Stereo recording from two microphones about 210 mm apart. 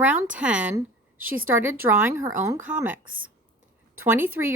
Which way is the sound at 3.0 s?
70° right (ahead or behind).